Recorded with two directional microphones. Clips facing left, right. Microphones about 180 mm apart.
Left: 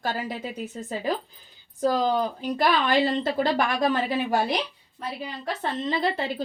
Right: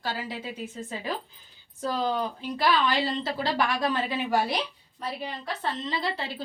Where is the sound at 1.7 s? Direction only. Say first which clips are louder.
Left 5 dB; 40° left (ahead or behind).